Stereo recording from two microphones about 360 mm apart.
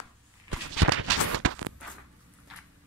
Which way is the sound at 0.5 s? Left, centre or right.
Right.